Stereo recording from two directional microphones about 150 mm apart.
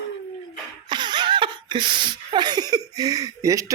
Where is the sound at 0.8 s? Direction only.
30° right (ahead or behind).